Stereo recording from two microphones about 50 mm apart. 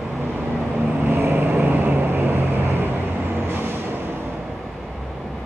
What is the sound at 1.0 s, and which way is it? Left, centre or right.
Vehicle, right.